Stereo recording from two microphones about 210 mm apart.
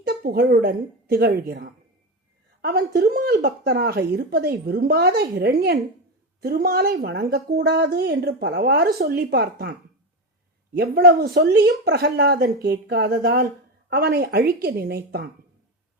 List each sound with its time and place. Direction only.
0.0 s a woman's voice: 45° right (ahead or behind)
10.8 s a woman's voice: 50° right (ahead or behind)